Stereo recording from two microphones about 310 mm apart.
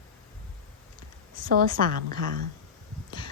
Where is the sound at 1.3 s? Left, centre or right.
Right.